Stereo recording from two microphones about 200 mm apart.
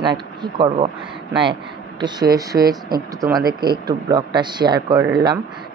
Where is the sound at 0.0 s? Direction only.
20° right (ahead or behind).